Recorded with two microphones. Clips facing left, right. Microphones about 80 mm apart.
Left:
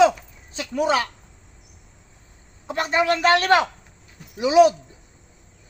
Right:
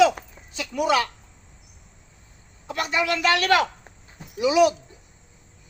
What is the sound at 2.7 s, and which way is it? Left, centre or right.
A man's voice, left.